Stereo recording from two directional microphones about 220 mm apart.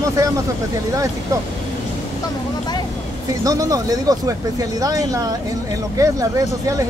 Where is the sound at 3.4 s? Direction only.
15° right (ahead or behind).